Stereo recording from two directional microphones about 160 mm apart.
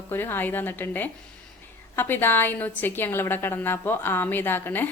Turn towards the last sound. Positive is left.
turn(degrees=15)  # may be behind; listen again after turning